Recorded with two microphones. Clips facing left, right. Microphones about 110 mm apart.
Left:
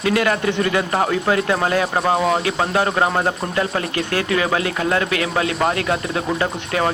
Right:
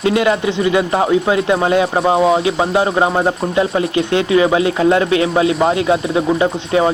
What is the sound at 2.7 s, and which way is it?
Speech, 20° right (ahead or behind).